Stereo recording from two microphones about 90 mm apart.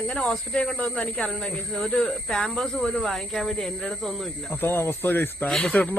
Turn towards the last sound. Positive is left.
turn(degrees=5)  # may be behind; listen again after turning